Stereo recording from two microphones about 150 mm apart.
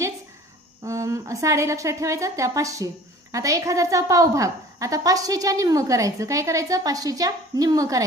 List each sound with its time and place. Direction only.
0.9 s a woman's voice: 20° right (ahead or behind)